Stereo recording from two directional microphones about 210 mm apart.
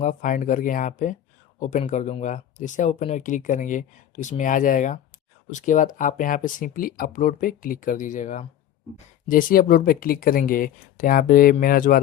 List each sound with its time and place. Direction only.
0.0 s speech: 40° left (ahead or behind)